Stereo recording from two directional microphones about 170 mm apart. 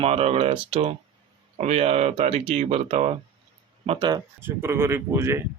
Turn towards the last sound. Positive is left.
turn(degrees=-15)  # may be behind; listen again after turning